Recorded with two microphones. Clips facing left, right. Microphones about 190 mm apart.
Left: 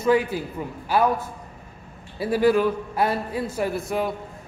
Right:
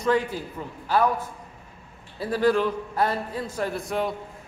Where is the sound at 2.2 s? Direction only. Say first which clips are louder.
Left 3 dB; 10° left (ahead or behind).